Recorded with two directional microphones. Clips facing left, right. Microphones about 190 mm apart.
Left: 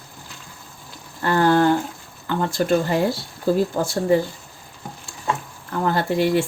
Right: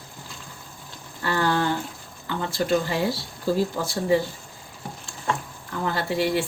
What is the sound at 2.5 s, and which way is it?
Speech, 50° left (ahead or behind).